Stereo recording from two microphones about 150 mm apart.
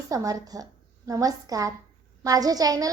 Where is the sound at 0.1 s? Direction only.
20° right (ahead or behind).